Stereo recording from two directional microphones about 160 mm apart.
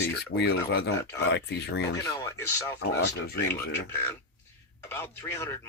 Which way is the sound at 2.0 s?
20° left (ahead or behind).